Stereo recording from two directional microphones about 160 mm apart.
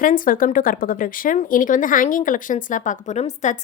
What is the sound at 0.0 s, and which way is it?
Speech, 60° left (ahead or behind).